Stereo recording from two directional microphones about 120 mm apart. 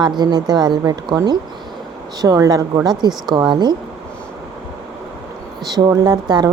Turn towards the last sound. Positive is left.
turn(degrees=-35)  # may be behind; listen again after turning